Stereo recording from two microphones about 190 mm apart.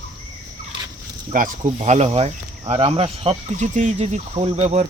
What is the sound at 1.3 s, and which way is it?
Speech, 45° right (ahead or behind).